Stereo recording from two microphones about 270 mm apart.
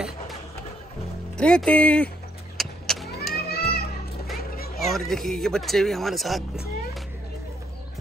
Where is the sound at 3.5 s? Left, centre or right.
Left.